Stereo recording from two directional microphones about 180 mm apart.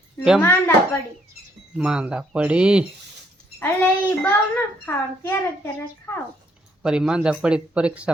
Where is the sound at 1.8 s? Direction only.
5° right (ahead or behind).